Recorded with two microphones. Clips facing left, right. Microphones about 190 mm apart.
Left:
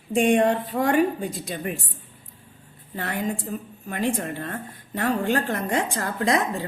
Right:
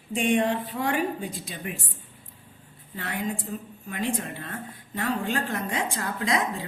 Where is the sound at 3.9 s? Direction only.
50° left (ahead or behind).